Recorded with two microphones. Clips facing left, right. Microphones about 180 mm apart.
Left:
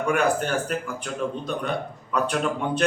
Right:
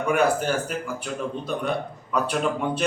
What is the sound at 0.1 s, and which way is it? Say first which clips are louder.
A man's voice: right 2 dB; 5° right (ahead or behind).